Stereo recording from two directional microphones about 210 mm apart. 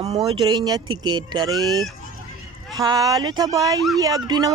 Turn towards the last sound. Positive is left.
turn(degrees=-20)  # may be behind; listen again after turning